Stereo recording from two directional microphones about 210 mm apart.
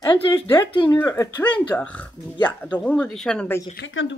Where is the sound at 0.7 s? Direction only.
25° left (ahead or behind); by 3.5 s 5° left (ahead or behind).